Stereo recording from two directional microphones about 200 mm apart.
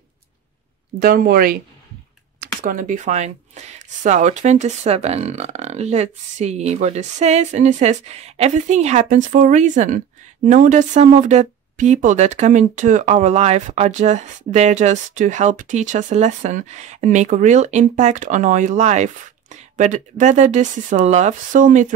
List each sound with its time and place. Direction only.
1.0 s speech: 50° right (ahead or behind)